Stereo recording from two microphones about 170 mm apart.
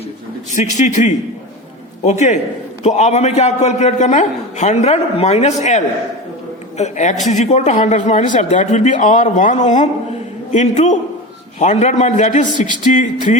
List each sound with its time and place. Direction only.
0.5 s a man's voice: 45° left (ahead or behind)